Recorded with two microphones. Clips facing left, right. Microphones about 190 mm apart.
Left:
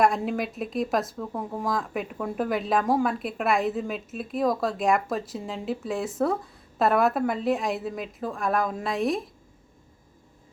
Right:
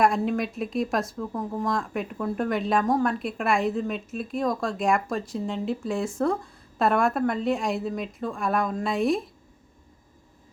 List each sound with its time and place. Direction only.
0.0 s speech: centre (ahead or behind)